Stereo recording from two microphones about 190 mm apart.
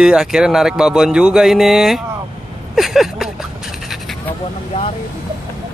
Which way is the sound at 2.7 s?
Centre (ahead or behind).